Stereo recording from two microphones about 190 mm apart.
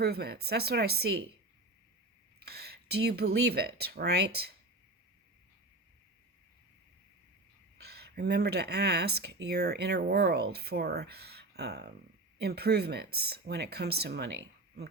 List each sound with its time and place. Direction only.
0.0 s speech: 55° right (ahead or behind)
2.4 s speech: 55° right (ahead or behind)
7.9 s speech: 60° right (ahead or behind)